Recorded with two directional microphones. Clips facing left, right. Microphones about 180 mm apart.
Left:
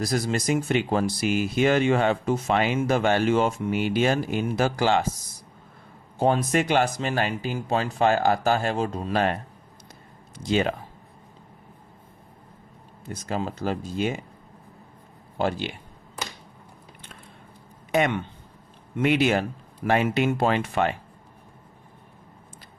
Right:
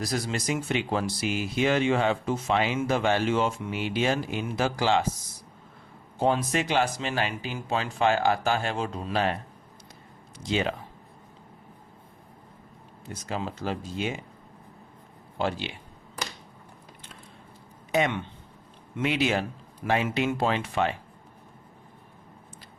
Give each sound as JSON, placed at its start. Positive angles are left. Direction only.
{"t": 0.0, "sound": "speech", "side_deg": 45}
{"t": 6.1, "sound": "speech", "side_deg": 50}
{"t": 10.5, "sound": "speech", "side_deg": 45}
{"t": 13.2, "sound": "speech", "side_deg": 45}
{"t": 15.4, "sound": "speech", "side_deg": 45}
{"t": 17.9, "sound": "speech", "side_deg": 55}